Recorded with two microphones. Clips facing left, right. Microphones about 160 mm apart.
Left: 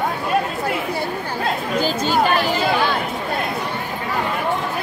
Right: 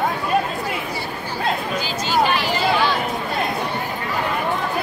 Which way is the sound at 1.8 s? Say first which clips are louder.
Left 4 dB; 50° left (ahead or behind).